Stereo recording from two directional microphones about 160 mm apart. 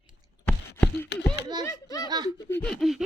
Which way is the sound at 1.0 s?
90° left.